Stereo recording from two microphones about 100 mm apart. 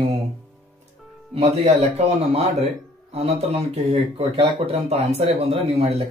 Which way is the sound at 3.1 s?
90° right.